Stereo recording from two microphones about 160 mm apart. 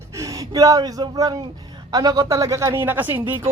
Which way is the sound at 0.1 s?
20° right (ahead or behind).